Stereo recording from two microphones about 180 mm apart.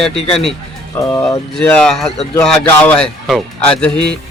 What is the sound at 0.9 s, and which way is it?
Speech, 15° left (ahead or behind).